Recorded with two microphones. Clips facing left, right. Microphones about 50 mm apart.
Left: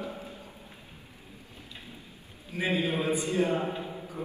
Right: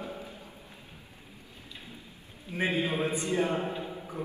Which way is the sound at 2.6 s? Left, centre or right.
Right.